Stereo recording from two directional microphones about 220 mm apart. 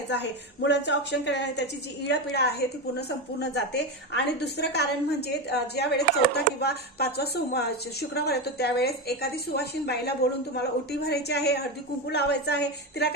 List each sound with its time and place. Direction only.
0.1 s a woman's voice: 50° left (ahead or behind)